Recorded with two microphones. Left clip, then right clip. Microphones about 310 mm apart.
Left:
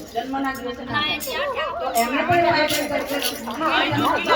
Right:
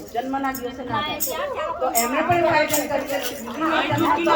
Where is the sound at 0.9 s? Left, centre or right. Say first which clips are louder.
Left 2 dB; right.